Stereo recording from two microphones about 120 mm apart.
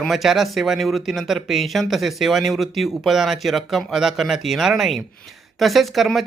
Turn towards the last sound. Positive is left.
turn(degrees=0)  # may be behind; listen again after turning